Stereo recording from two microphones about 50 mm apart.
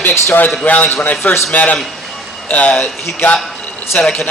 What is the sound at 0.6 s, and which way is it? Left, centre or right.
A man's voice, left.